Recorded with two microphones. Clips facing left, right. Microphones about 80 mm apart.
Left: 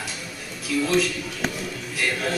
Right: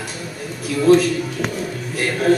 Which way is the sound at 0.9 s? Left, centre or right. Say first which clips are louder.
Right 9 dB; right.